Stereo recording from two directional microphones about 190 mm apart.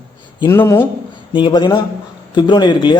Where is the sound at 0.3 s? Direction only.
15° left (ahead or behind).